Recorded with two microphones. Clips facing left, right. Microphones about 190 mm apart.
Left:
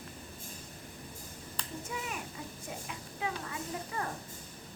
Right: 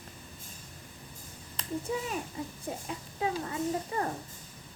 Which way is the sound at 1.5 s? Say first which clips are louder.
Right 8 dB; 30° right (ahead or behind).